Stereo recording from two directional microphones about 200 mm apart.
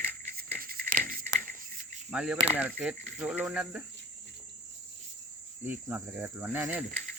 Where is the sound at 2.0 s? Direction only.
5° right (ahead or behind).